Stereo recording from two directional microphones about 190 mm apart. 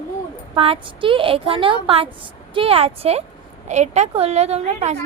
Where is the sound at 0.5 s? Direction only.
30° right (ahead or behind).